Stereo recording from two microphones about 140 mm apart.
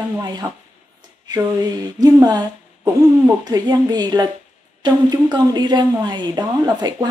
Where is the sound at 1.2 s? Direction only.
30° right (ahead or behind).